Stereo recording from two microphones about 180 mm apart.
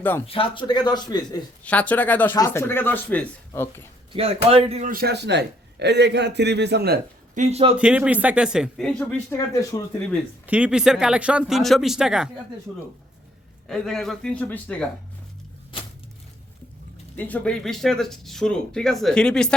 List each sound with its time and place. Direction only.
0.3 s a man's voice: 30° left (ahead or behind)
1.6 s speech: 5° left (ahead or behind)
4.1 s speech: 35° right (ahead or behind)
4.9 s a man's voice: 60° right (ahead or behind)
7.3 s speech: 35° right (ahead or behind)
7.8 s speech: 5° right (ahead or behind)
9.7 s a man's voice: 25° left (ahead or behind)
10.4 s speech: 5° right (ahead or behind)
13.7 s speech: 5° left (ahead or behind)
17.2 s speech: 10° left (ahead or behind)